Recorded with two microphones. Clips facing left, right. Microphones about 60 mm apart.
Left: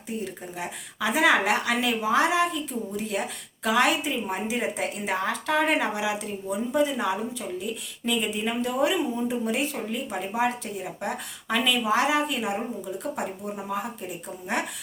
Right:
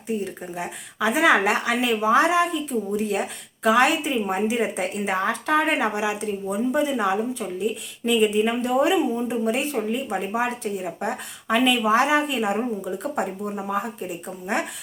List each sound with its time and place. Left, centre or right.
0.5 s a woman's voice: right